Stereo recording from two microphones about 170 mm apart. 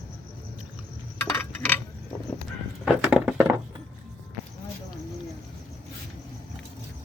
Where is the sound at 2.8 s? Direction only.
5° right (ahead or behind).